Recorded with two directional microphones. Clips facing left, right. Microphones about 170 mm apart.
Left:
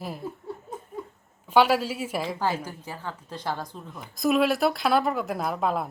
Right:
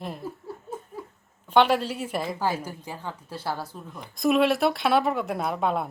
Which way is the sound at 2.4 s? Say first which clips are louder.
Even; 10° right (ahead or behind).